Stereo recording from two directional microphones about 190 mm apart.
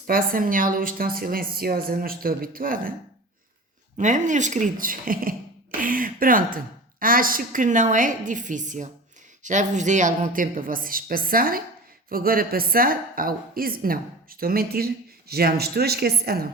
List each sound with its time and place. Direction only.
0.1 s a woman's voice: 45° right (ahead or behind)
3.9 s a woman's voice: 40° right (ahead or behind)